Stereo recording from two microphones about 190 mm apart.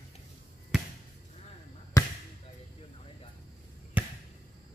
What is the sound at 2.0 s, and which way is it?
Basketball bounce, 20° left (ahead or behind).